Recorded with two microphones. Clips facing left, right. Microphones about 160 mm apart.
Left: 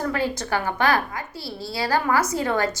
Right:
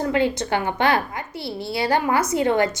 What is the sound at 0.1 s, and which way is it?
A woman's voice, 25° right (ahead or behind).